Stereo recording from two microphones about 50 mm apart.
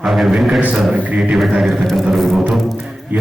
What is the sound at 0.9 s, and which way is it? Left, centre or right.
Music, right.